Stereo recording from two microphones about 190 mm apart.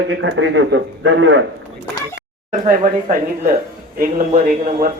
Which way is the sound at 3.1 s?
35° right (ahead or behind).